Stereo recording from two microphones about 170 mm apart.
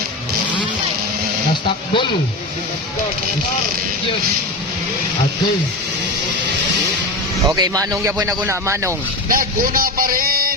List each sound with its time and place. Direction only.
7.4 s a man's voice: 20° right (ahead or behind)
9.3 s a man's voice: 55° right (ahead or behind)